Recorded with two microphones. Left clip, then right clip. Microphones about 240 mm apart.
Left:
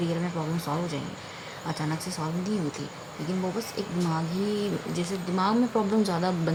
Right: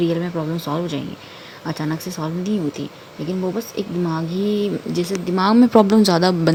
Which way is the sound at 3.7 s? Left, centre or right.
Right.